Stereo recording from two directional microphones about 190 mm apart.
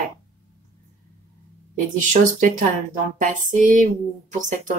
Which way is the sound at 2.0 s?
40° right (ahead or behind).